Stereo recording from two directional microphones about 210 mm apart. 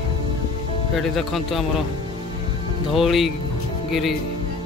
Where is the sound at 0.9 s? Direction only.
Centre (ahead or behind).